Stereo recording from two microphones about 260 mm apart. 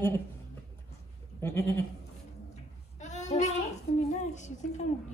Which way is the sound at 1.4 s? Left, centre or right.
Centre.